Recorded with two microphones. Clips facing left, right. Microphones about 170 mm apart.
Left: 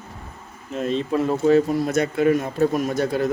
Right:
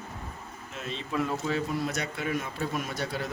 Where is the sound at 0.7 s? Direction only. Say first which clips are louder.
Left 11 dB; 45° left (ahead or behind).